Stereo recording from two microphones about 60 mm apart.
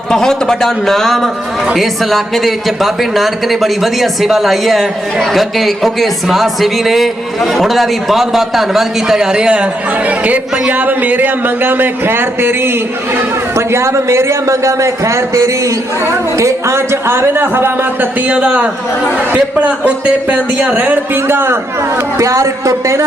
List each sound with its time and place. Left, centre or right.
0.1 s a man's voice: centre; by 18.1 s right
18.3 s a man's voice: right
22.2 s speech: right